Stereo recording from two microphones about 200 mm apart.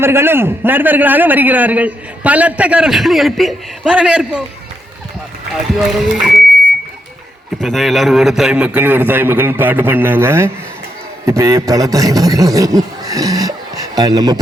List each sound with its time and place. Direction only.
0.0 s a man's voice: 10° right (ahead or behind)
6.0 s speech: centre (ahead or behind)
7.6 s a man's voice: centre (ahead or behind); by 14.3 s 20° right (ahead or behind)